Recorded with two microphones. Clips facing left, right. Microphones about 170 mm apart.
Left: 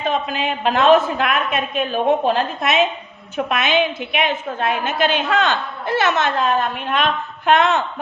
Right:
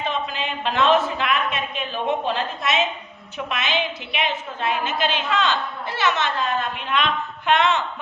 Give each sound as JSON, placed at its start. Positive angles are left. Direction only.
{"t": 0.0, "sound": "a woman's voice", "side_deg": 50}